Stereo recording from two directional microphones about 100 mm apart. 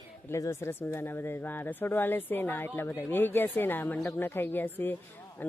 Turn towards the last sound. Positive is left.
turn(degrees=20)  # may be behind; listen again after turning